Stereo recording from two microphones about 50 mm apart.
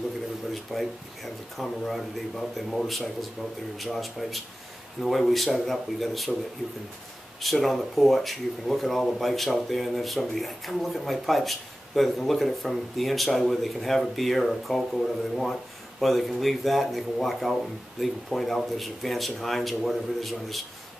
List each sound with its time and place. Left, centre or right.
0.7 s speech: centre
7.4 s speech: centre